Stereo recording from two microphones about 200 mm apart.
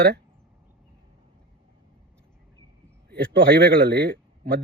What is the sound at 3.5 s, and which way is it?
Speech, 50° right (ahead or behind).